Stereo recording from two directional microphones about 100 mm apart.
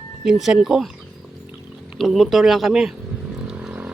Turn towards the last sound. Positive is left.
turn(degrees=-10)  # may be behind; listen again after turning